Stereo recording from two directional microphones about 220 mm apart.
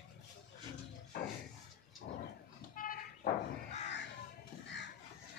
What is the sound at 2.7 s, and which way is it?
Crow, 40° left (ahead or behind).